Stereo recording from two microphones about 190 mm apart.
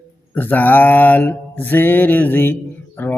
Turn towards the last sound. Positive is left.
turn(degrees=10)  # may be behind; listen again after turning